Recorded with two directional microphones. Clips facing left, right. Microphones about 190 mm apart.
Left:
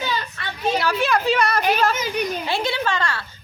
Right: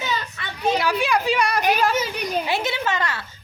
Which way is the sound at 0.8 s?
15° right (ahead or behind).